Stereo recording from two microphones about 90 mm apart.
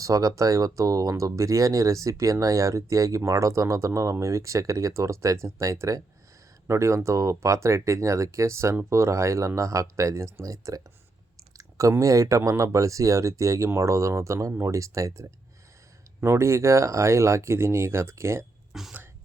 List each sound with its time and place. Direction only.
0.0 s speech: 40° right (ahead or behind)
18.7 s speech: 5° right (ahead or behind)